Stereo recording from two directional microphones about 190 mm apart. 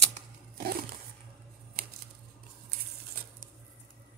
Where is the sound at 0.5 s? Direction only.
55° right (ahead or behind).